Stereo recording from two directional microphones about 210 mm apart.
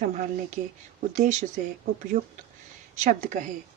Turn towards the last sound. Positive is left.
turn(degrees=-35)  # may be behind; listen again after turning